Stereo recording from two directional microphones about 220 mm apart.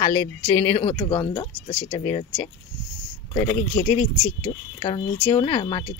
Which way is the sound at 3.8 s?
10° left (ahead or behind).